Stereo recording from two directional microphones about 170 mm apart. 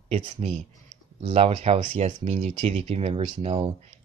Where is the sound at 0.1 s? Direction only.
40° right (ahead or behind).